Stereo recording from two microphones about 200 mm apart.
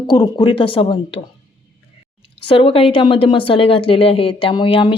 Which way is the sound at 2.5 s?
25° left (ahead or behind).